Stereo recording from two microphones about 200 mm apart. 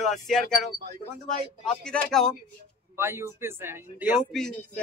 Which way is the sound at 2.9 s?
15° right (ahead or behind).